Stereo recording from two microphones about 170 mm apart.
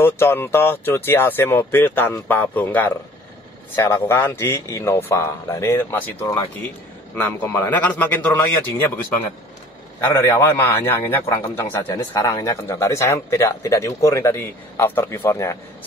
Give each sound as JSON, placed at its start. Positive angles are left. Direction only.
{"t": 0.0, "sound": "a man's voice", "side_deg": 15}
{"t": 10.2, "sound": "a man's voice", "side_deg": 15}